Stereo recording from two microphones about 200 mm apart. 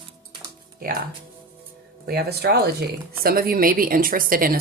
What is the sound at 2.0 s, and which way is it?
Speech, 50° right (ahead or behind).